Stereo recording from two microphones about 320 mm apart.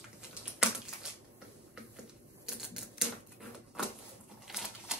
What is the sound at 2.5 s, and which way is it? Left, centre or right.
Typewriter, centre.